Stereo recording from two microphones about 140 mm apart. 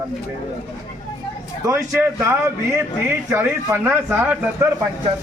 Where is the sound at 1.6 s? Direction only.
20° right (ahead or behind).